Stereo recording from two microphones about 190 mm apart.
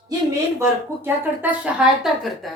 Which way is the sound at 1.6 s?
Centre (ahead or behind).